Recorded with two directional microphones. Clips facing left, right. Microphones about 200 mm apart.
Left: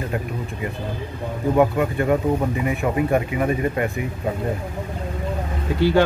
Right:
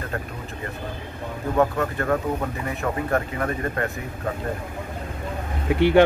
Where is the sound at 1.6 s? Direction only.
15° left (ahead or behind).